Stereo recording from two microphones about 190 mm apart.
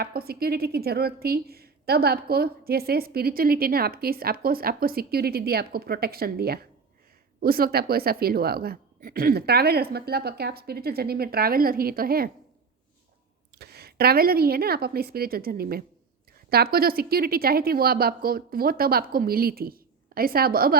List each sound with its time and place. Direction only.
0.0 s a woman's voice: 55° right (ahead or behind)
13.6 s a woman's voice: 55° right (ahead or behind)